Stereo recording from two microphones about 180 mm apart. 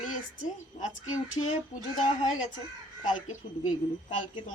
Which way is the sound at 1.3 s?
40° left (ahead or behind).